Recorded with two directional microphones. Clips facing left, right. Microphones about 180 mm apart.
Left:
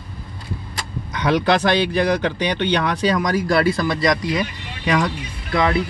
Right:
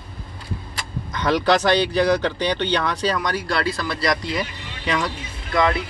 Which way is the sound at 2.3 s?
10° left (ahead or behind).